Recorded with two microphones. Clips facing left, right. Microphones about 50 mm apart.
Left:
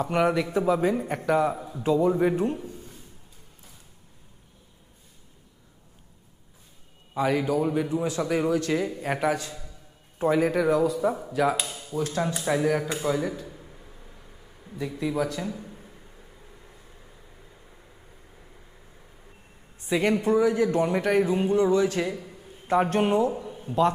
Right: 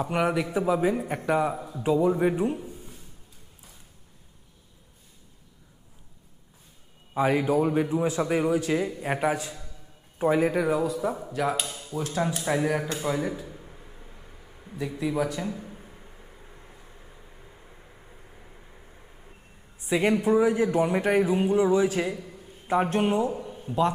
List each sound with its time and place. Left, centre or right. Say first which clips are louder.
0.0 s a man's voice: left 2 dB; centre
7.2 s a man's voice: right 1 dB; right
13.0 s a sound: left 1 dB; centre
19.9 s a man's voice: even; centre